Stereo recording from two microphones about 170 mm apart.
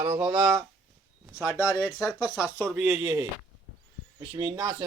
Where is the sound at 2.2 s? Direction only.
20° left (ahead or behind).